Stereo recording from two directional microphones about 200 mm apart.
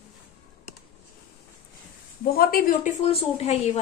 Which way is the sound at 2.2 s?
45° left (ahead or behind).